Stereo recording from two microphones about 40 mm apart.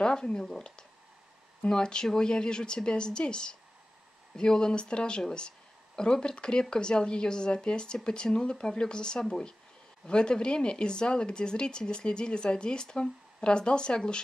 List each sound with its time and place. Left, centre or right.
0.0 s speech: centre